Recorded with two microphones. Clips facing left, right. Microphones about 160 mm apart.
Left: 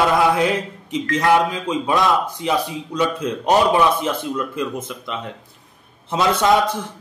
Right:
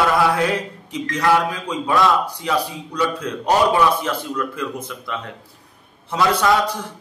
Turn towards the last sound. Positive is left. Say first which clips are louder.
# left 1 dB
turn(degrees=20)  # may be behind; listen again after turning